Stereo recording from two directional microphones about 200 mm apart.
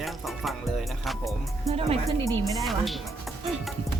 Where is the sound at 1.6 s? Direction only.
30° right (ahead or behind).